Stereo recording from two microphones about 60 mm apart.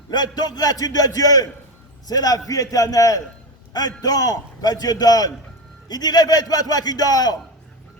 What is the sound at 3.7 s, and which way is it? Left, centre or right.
A man's voice, left.